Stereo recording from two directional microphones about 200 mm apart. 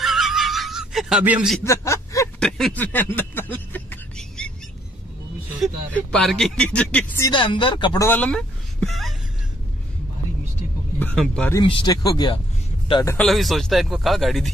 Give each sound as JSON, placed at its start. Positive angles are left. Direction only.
{"t": 0.0, "sound": "snicker", "side_deg": 0}
{"t": 1.6, "sound": "a sound", "side_deg": 15}
{"t": 2.4, "sound": "a sound", "side_deg": 0}
{"t": 5.6, "sound": "speech", "side_deg": 5}
{"t": 7.2, "sound": "speech", "side_deg": 25}
{"t": 8.1, "sound": "speech", "side_deg": 5}
{"t": 11.0, "sound": "speech", "side_deg": 5}
{"t": 11.6, "sound": "speech", "side_deg": 25}
{"t": 13.2, "sound": "speech", "side_deg": 0}